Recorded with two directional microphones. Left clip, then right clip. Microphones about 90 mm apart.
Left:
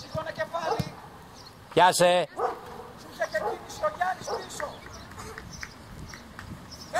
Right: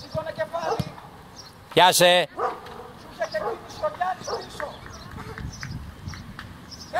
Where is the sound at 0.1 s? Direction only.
40° left (ahead or behind).